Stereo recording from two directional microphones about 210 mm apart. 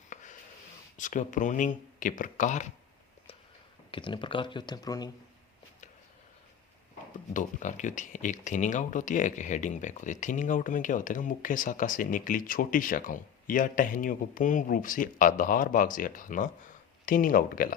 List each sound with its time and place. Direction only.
0.1 s a sound: 35° left (ahead or behind)
0.9 s speech: 35° left (ahead or behind)
3.9 s speech: 25° left (ahead or behind)
7.3 s speech: 35° left (ahead or behind)